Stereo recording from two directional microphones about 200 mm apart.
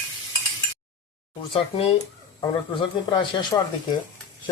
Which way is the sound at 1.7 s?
25° left (ahead or behind).